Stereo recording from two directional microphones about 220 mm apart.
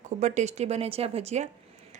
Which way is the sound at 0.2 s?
30° right (ahead or behind).